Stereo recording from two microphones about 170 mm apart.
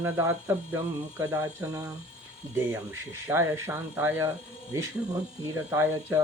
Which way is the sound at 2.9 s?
15° right (ahead or behind).